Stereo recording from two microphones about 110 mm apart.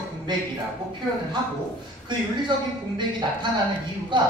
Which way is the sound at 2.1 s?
45° right (ahead or behind).